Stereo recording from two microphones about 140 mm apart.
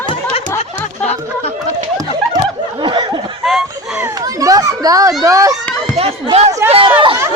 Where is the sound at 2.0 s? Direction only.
30° right (ahead or behind).